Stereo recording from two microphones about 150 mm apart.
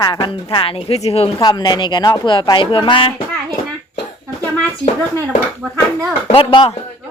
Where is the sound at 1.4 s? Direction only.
25° left (ahead or behind).